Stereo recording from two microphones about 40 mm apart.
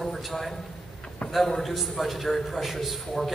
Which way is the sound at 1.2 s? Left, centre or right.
Left.